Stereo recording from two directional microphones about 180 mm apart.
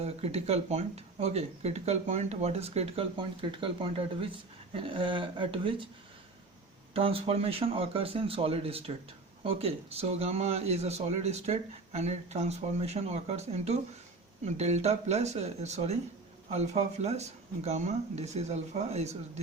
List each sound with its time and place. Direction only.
0.0 s speech: 35° right (ahead or behind)
6.9 s speech: 30° right (ahead or behind)